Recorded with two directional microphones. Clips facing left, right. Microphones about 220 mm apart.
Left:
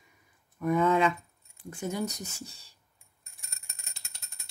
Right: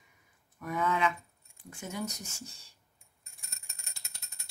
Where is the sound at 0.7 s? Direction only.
35° left (ahead or behind).